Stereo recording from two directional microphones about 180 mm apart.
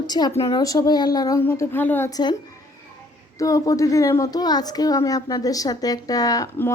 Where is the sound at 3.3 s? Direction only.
20° left (ahead or behind).